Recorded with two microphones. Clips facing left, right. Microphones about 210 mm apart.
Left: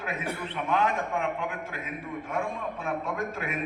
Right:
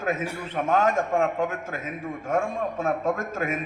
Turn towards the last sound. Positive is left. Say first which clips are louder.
# right 3 dB
turn(degrees=-45)  # may be behind; listen again after turning